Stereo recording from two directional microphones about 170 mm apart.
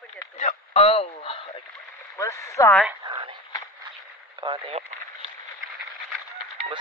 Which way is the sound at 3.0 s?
30° right (ahead or behind).